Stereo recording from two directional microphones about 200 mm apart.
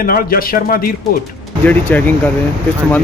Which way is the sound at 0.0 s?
45° left (ahead or behind).